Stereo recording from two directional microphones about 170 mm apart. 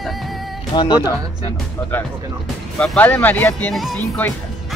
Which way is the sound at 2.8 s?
5° left (ahead or behind).